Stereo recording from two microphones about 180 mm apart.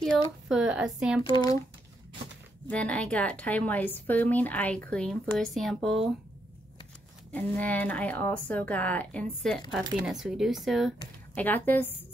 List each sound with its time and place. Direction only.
0.5 s speech: 5° right (ahead or behind)
1.3 s speech: 20° left (ahead or behind)
2.7 s speech: 5° left (ahead or behind)
7.3 s speech: 10° left (ahead or behind)
11.3 s speech: 10° left (ahead or behind)